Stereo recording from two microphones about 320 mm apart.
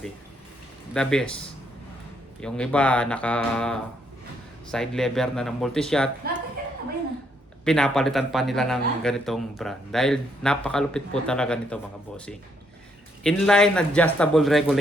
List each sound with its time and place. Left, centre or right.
0.9 s a man's voice: centre
2.4 s a man's voice: centre
7.6 s a man's voice: centre